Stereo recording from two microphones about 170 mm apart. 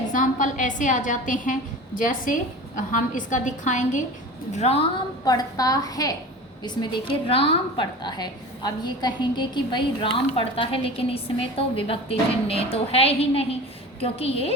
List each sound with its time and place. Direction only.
0.1 s a woman's voice: 50° left (ahead or behind)
5.2 s a woman's voice: 20° left (ahead or behind)
6.7 s a woman's voice: 30° left (ahead or behind)